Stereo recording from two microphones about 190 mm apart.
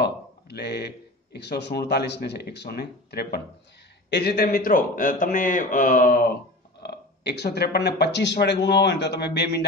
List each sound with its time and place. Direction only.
0.0 s a man's voice: 60° left (ahead or behind)
6.8 s speech: 60° left (ahead or behind)